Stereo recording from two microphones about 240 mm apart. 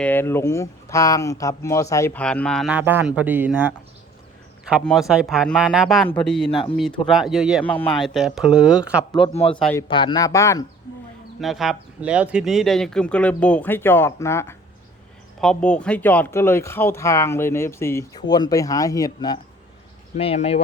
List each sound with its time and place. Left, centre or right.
0.0 s speech: centre
9.1 s speech: left
9.6 s speech: centre
9.9 s speech: centre
11.3 s speech: centre; by 20.6 s left